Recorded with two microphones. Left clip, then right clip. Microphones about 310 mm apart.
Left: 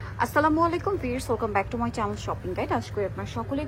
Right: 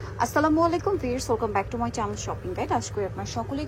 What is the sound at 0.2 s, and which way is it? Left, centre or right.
A woman's voice, centre.